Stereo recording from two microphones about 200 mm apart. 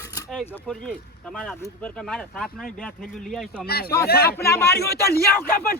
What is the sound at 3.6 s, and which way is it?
Speech, 50° left (ahead or behind).